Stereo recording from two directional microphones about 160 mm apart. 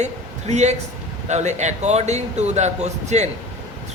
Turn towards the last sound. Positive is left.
turn(degrees=-45)  # may be behind; listen again after turning